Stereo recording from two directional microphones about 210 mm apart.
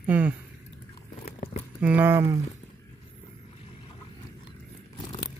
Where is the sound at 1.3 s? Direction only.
30° left (ahead or behind).